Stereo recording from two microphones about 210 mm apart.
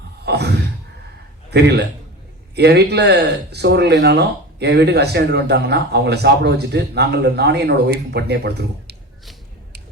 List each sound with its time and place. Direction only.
0.3 s a man's voice: 50° right (ahead or behind)